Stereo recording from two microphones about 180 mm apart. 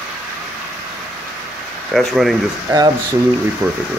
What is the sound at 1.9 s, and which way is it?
Speech, centre (ahead or behind).